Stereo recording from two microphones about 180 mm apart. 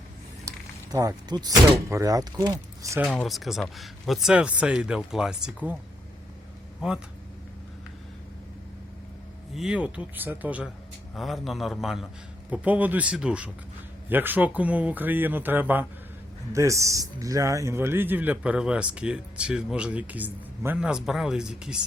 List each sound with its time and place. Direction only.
0.4 s speech: 20° right (ahead or behind)
3.0 s speech: 5° left (ahead or behind)
6.8 s speech: 5° right (ahead or behind)
9.6 s a man's voice: 5° right (ahead or behind)